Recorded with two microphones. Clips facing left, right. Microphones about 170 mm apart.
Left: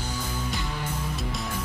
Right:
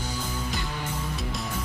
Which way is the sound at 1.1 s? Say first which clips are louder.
Even; centre (ahead or behind).